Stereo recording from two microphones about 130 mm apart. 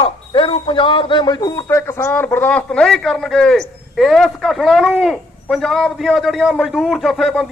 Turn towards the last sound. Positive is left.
turn(degrees=0)  # may be behind; listen again after turning